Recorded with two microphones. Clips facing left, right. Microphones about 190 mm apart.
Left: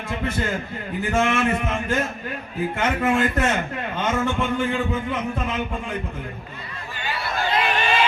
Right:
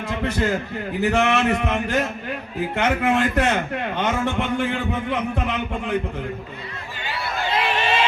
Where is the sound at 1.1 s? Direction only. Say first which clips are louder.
Even; 70° right (ahead or behind).